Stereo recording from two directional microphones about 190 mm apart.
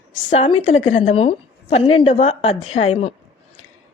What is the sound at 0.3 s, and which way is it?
A woman's voice, 30° left (ahead or behind).